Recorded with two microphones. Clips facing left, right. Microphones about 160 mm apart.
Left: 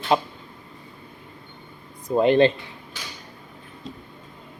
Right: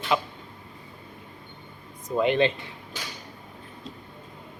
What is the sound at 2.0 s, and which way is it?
Speech, 35° left (ahead or behind).